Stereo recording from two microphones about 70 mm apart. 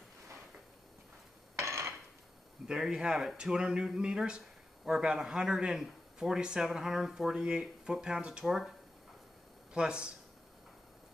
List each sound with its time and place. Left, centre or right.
1.6 s dishes: right
2.6 s speech: centre
9.8 s speech: centre